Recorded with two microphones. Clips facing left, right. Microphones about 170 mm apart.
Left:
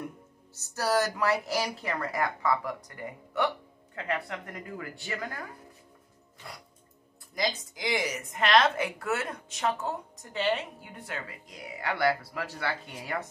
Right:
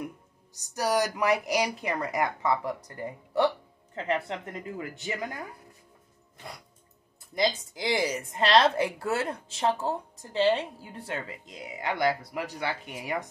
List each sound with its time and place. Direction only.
0.6 s a woman's voice: 15° right (ahead or behind)
6.4 s a woman's voice: 20° right (ahead or behind)